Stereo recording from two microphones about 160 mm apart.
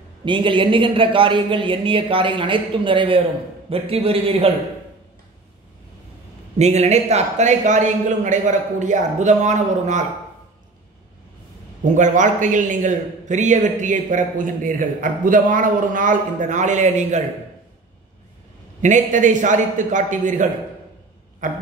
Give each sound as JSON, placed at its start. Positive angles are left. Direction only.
{"t": 0.2, "sound": "a man's voice", "side_deg": -30}
{"t": 6.6, "sound": "a man's voice", "side_deg": -45}
{"t": 11.8, "sound": "a man's voice", "side_deg": -50}
{"t": 18.8, "sound": "a man's voice", "side_deg": -50}